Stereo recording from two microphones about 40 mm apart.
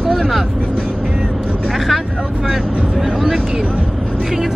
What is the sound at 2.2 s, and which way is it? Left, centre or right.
Speech, right.